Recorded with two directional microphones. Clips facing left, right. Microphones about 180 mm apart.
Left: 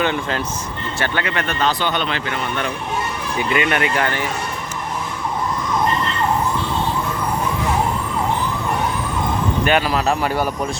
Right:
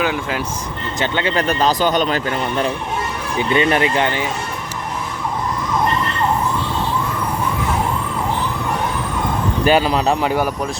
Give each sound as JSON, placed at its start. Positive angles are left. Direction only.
{"t": 0.0, "sound": "speech", "side_deg": -5}
{"t": 0.9, "sound": "speech", "side_deg": -20}
{"t": 9.6, "sound": "speech", "side_deg": -30}